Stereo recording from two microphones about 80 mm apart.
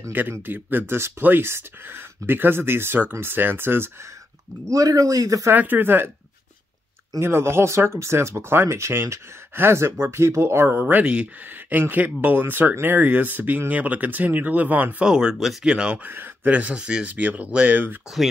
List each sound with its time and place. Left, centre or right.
0.1 s speech: right
4.6 s a man's voice: right
5.5 s speech: right
7.2 s speech: right
15.0 s speech: centre